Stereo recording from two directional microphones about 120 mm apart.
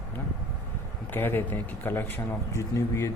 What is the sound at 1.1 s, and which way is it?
Speech, 15° left (ahead or behind).